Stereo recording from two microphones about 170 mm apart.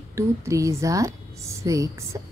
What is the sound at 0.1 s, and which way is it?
A woman's voice, 20° right (ahead or behind).